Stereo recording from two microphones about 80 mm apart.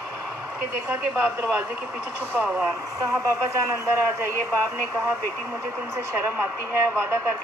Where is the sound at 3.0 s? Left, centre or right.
Right.